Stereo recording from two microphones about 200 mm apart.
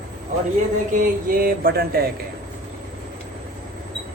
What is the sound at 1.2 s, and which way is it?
Speech, 45° right (ahead or behind).